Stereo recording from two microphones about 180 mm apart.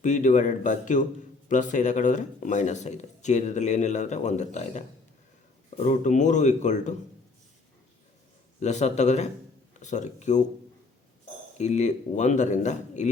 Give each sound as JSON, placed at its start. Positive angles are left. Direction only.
{"t": 0.0, "sound": "speech", "side_deg": 45}
{"t": 8.6, "sound": "speech", "side_deg": 40}
{"t": 11.5, "sound": "speech", "side_deg": 40}